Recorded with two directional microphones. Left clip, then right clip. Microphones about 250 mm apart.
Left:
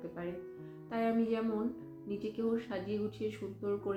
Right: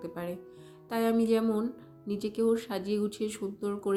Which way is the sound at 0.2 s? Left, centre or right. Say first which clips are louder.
Right 3 dB; right.